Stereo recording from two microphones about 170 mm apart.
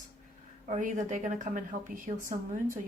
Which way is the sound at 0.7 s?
50° right (ahead or behind).